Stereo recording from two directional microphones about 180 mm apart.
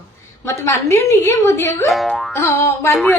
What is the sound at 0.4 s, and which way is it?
A woman's voice, 15° left (ahead or behind).